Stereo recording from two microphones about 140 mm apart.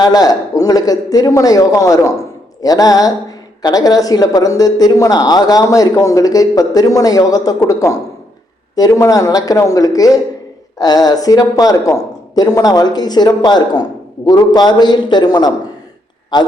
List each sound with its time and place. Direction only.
0.0 s speech: 30° left (ahead or behind)